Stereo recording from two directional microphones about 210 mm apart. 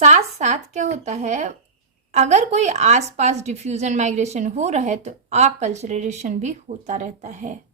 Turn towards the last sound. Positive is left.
turn(degrees=-35)  # may be behind; listen again after turning